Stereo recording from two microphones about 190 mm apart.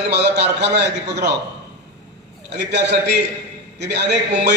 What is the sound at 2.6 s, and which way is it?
A man's voice, 60° right (ahead or behind).